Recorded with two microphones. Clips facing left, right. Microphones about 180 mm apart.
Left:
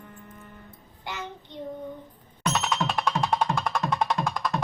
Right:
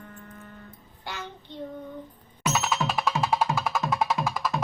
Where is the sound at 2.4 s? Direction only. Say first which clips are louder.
Even; 5° right (ahead or behind).